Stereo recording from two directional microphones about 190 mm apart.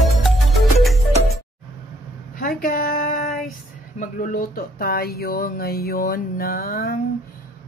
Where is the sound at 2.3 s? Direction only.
50° left (ahead or behind).